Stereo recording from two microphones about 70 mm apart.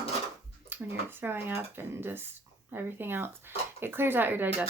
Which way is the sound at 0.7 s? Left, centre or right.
Right.